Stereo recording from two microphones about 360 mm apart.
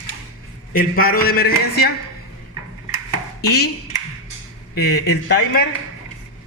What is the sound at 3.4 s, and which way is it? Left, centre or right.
Speech, left.